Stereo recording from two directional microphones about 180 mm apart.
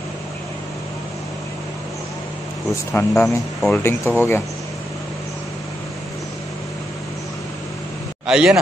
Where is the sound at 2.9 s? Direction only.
15° left (ahead or behind).